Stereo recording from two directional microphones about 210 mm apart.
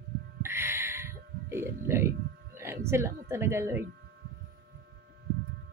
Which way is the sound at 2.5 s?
10° right (ahead or behind).